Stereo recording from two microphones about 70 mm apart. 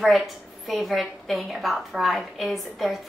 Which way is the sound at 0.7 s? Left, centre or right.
Centre.